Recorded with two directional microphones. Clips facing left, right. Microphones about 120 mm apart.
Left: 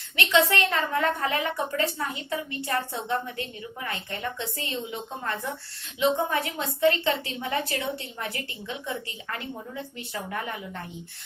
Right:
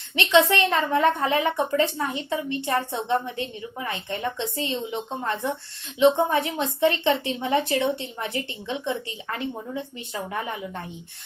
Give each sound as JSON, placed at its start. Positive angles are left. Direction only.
{"t": 0.2, "sound": "a woman's voice", "side_deg": -20}